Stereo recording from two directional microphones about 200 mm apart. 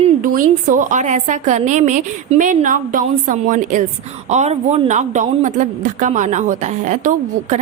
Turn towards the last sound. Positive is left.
turn(degrees=-35)  # may be behind; listen again after turning